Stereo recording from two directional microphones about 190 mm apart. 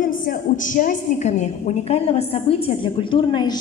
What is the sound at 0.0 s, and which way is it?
A woman's voice, 45° left (ahead or behind).